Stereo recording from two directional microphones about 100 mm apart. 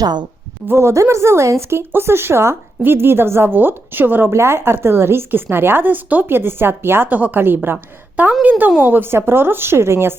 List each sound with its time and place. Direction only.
0.0 s a woman's voice: 45° right (ahead or behind)
0.7 s speech: 25° right (ahead or behind)